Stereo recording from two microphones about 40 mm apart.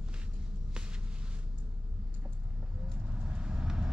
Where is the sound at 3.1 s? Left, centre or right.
Right.